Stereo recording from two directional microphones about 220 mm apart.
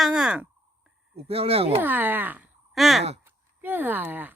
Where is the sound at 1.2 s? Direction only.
25° right (ahead or behind).